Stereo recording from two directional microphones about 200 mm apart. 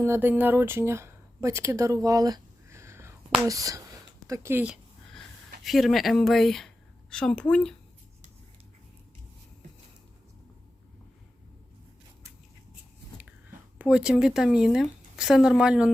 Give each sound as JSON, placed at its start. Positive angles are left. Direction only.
{"t": 0.0, "sound": "speech", "side_deg": -10}
{"t": 4.3, "sound": "a sound", "side_deg": -10}
{"t": 5.6, "sound": "speech", "side_deg": 0}
{"t": 13.7, "sound": "speech", "side_deg": -5}